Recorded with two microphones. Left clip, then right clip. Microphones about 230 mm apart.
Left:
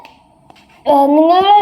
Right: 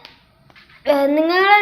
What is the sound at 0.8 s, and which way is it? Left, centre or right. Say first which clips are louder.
Speech: left 7 dB; centre.